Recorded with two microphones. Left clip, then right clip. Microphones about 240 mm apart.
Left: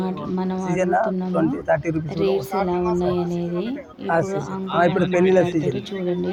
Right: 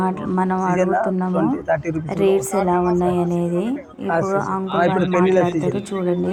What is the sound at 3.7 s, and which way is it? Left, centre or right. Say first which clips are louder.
Speech: even; centre.